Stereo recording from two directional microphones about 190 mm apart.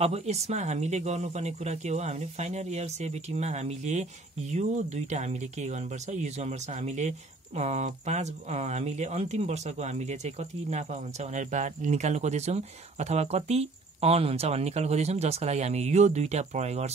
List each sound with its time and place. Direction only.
0.0 s speech: 35° right (ahead or behind)